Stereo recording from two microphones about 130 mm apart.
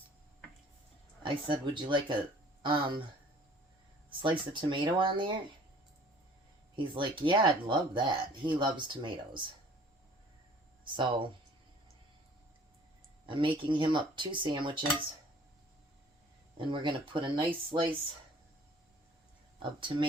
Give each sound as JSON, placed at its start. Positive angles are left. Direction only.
{"t": 1.2, "sound": "speech", "side_deg": -40}
{"t": 4.2, "sound": "speech", "side_deg": -40}
{"t": 6.7, "sound": "speech", "side_deg": -40}
{"t": 10.9, "sound": "speech", "side_deg": -40}
{"t": 13.2, "sound": "speech", "side_deg": -40}
{"t": 16.6, "sound": "speech", "side_deg": -40}